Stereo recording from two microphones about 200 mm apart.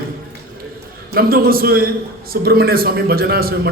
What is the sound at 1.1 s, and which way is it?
A man's voice, 50° right (ahead or behind).